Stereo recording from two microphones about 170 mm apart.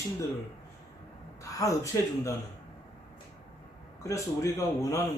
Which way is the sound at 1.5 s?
20° left (ahead or behind).